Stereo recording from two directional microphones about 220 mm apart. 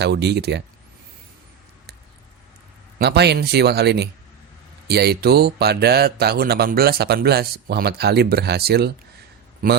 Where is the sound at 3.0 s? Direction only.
50° right (ahead or behind).